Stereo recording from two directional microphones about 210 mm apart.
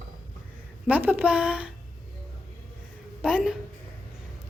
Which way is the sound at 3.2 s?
5° right (ahead or behind).